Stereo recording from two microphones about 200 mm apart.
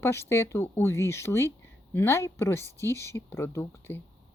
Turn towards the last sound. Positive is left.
turn(degrees=10)  # may be behind; listen again after turning